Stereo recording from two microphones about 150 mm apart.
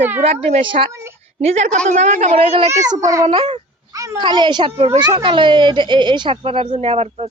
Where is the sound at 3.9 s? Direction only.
20° right (ahead or behind); by 7.3 s 45° right (ahead or behind).